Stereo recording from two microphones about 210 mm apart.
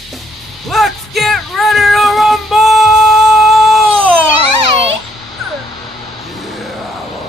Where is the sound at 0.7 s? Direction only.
Centre (ahead or behind).